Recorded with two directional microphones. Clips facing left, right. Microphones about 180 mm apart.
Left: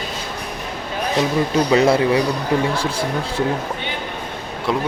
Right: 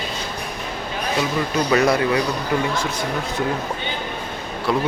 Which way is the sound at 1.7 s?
25° left (ahead or behind).